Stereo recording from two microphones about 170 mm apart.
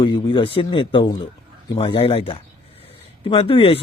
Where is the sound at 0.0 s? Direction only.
30° left (ahead or behind).